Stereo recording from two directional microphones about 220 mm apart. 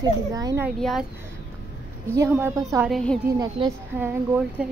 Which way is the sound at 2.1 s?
10° right (ahead or behind).